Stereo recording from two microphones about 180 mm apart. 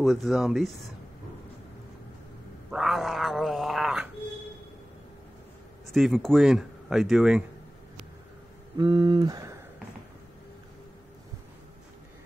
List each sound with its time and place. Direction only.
0.0 s speech: centre (ahead or behind)
2.7 s cat: centre (ahead or behind)
5.9 s speech: centre (ahead or behind)
8.7 s speech: 25° right (ahead or behind)